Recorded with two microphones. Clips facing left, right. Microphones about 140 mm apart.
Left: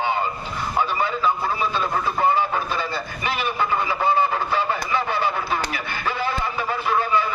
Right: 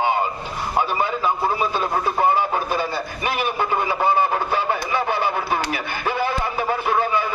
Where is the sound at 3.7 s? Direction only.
25° right (ahead or behind).